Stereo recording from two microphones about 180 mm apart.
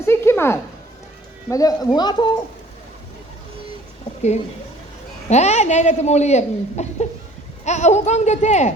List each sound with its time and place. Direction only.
0.0 s a sound: 15° left (ahead or behind)
1.5 s speech: 20° left (ahead or behind)
5.3 s speech: 40° left (ahead or behind)